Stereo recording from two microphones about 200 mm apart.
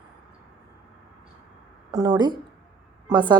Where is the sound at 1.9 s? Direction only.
20° right (ahead or behind).